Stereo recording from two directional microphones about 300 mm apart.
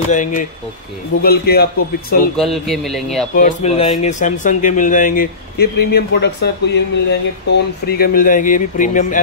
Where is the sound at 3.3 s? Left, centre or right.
Left.